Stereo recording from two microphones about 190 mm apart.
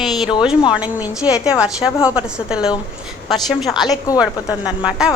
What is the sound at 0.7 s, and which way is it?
A woman's voice, 10° right (ahead or behind).